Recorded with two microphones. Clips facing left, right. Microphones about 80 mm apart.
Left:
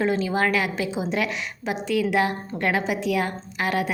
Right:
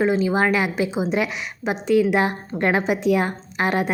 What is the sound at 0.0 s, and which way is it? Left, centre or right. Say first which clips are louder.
A woman's voice: right 3 dB; centre.